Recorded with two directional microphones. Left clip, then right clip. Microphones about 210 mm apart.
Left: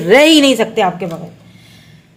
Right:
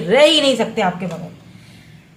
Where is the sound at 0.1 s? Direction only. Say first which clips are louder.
Left 4 dB; 40° left (ahead or behind).